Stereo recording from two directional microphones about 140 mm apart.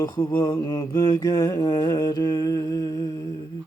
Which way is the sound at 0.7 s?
20° left (ahead or behind).